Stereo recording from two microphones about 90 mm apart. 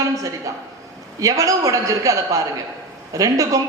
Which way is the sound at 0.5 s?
40° right (ahead or behind).